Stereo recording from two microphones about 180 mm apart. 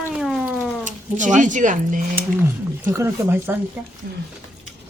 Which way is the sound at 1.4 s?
45° right (ahead or behind).